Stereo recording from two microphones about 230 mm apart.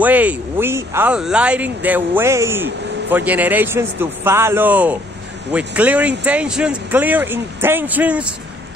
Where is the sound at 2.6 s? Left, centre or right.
Right.